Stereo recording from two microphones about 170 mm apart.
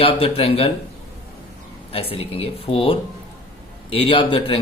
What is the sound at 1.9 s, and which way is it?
A man's voice, 35° left (ahead or behind).